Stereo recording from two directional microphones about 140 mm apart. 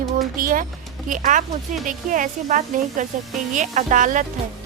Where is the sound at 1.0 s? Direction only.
70° right (ahead or behind).